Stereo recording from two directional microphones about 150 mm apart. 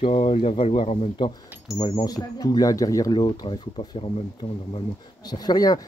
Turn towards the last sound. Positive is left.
turn(degrees=25)  # may be behind; listen again after turning